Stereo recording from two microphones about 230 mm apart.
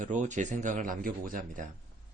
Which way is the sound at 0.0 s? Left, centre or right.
Right.